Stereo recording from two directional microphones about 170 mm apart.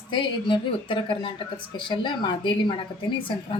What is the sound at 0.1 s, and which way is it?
A woman's voice, 30° left (ahead or behind).